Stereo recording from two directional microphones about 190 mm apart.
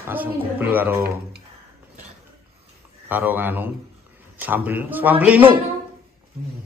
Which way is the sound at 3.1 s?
10° right (ahead or behind).